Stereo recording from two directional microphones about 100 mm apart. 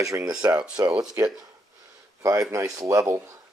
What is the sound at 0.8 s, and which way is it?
Speech, 15° right (ahead or behind).